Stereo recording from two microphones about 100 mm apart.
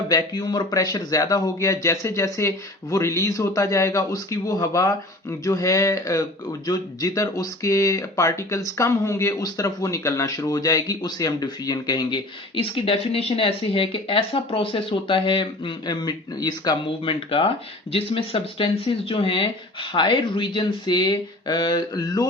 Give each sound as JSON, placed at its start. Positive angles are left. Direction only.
{"t": 0.1, "sound": "speech", "side_deg": 40}
{"t": 12.5, "sound": "speech", "side_deg": 70}
{"t": 17.1, "sound": "speech", "side_deg": 60}
{"t": 19.9, "sound": "speech", "side_deg": 50}